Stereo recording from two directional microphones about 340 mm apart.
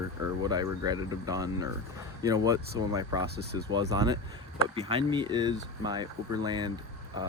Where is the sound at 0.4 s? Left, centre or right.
Centre.